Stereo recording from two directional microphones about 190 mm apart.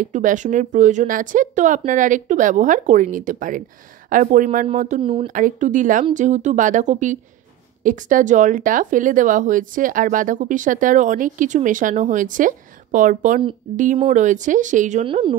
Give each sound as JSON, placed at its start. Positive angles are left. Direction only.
{"t": 0.0, "sound": "speech", "side_deg": -45}
{"t": 15.0, "sound": "speech", "side_deg": -25}